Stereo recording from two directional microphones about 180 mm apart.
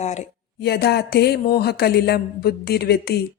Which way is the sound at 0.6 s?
65° left (ahead or behind).